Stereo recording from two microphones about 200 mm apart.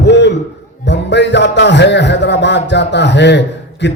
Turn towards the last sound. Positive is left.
turn(degrees=60)  # may be behind; listen again after turning